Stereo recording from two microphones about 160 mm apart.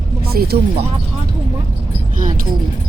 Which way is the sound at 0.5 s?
80° right.